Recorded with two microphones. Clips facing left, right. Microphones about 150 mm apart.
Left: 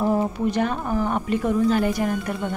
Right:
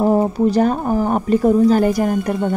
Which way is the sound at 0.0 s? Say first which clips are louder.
Right 7 dB; 35° right (ahead or behind).